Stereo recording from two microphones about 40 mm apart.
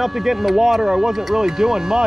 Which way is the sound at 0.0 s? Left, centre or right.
Centre.